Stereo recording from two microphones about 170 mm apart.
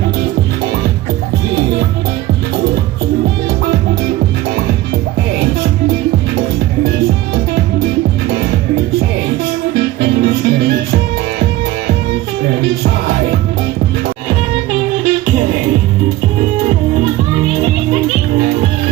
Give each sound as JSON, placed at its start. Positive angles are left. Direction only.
{"t": 9.7, "sound": "music", "side_deg": -70}